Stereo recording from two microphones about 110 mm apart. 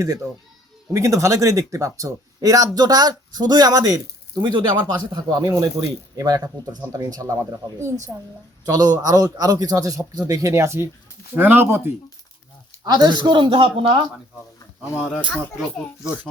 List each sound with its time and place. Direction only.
0.0 s speech: 30° right (ahead or behind)
12.8 s a man's voice: 40° right (ahead or behind)
14.9 s speech: 10° right (ahead or behind)